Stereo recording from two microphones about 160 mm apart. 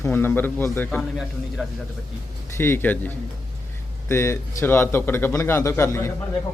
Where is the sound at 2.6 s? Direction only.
15° left (ahead or behind).